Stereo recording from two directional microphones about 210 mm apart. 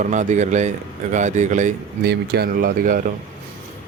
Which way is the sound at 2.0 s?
50° right (ahead or behind).